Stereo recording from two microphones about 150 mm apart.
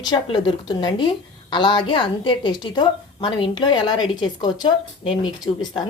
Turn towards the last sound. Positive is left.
turn(degrees=30)  # may be behind; listen again after turning